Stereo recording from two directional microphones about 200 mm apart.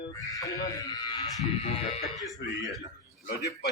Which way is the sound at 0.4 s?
20° left (ahead or behind).